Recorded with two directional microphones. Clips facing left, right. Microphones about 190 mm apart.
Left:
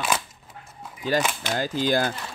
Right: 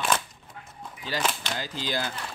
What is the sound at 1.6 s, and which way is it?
Speech, 50° left (ahead or behind).